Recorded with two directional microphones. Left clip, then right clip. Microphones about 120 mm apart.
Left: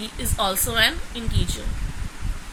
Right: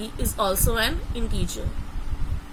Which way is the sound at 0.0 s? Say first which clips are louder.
Left 1 dB; 90° right.